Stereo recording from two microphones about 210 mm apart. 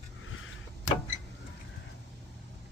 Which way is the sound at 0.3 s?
75° left (ahead or behind).